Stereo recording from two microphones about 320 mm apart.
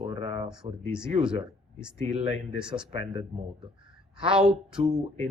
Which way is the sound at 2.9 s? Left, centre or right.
Centre.